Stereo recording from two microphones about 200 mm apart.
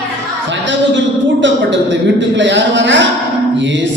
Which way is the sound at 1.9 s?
65° right (ahead or behind).